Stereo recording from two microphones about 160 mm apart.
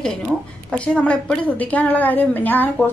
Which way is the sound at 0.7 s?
5° left (ahead or behind).